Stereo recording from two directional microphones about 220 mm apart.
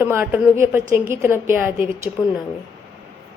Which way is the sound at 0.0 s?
10° right (ahead or behind).